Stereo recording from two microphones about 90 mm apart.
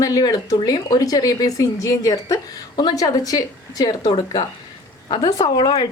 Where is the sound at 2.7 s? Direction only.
55° left (ahead or behind).